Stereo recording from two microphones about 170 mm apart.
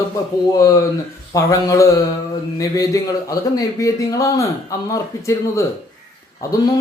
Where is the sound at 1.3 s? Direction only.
20° left (ahead or behind).